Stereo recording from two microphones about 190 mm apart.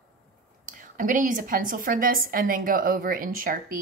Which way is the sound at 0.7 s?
45° right (ahead or behind).